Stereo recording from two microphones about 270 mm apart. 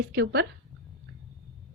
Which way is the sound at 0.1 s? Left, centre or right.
Right.